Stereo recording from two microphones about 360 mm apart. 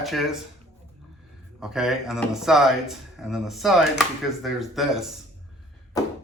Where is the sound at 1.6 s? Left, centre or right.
Centre.